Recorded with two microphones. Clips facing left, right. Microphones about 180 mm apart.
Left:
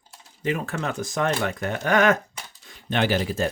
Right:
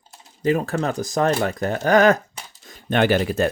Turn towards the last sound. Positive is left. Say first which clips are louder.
# right 5 dB
turn(degrees=-60)  # may be behind; listen again after turning